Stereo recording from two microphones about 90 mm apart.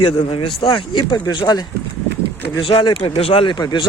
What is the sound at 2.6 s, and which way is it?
Speech, 65° left (ahead or behind).